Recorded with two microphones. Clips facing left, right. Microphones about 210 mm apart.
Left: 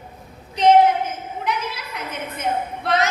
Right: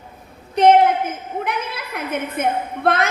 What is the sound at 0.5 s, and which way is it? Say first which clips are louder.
A woman's voice: right 1 dB; 55° right (ahead or behind).